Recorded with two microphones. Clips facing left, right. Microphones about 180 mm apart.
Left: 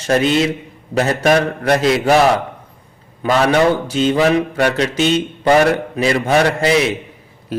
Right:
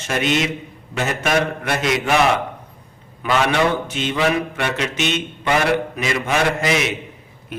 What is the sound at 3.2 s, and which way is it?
Mantra, 40° left (ahead or behind).